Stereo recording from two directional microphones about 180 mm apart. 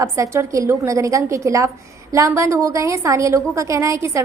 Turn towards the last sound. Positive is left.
turn(degrees=-15)  # may be behind; listen again after turning